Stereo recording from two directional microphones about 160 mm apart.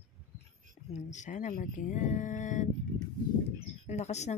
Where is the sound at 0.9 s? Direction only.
50° left (ahead or behind).